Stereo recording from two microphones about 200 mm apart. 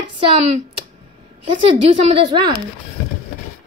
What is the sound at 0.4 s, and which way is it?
Speech, 35° right (ahead or behind).